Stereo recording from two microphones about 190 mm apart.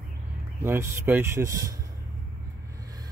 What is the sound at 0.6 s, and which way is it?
Speech, 10° right (ahead or behind).